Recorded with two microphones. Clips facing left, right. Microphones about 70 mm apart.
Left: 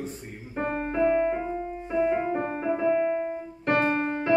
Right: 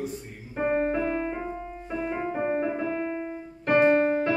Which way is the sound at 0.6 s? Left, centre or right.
Centre.